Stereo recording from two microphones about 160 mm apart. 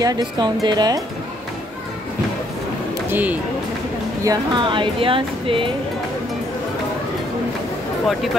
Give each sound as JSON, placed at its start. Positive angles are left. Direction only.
{"t": 0.0, "sound": "speech", "side_deg": -25}
{"t": 3.1, "sound": "speech", "side_deg": -10}
{"t": 4.2, "sound": "speech", "side_deg": -25}